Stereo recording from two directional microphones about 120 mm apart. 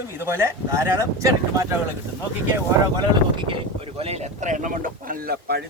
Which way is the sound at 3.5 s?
55° right (ahead or behind).